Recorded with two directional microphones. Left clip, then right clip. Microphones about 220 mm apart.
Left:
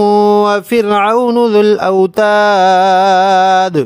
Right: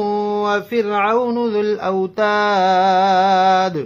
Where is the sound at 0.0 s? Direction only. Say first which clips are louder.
Left 10 dB; 50° left (ahead or behind).